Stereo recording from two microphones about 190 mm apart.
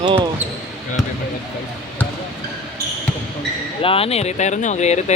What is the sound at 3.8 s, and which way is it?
Speech, 30° left (ahead or behind).